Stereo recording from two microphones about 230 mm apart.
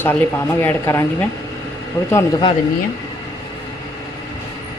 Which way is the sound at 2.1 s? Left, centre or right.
Centre.